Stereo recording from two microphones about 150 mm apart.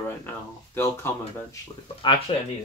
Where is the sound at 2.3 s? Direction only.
35° left (ahead or behind).